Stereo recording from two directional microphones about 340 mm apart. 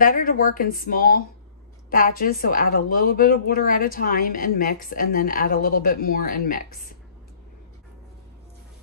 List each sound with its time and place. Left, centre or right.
0.0 s speech: left